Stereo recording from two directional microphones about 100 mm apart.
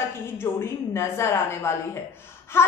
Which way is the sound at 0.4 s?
25° left (ahead or behind).